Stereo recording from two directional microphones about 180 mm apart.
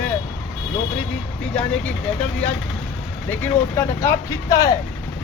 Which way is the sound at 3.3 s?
15° left (ahead or behind).